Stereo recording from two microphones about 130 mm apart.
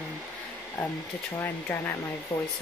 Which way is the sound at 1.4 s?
15° left (ahead or behind).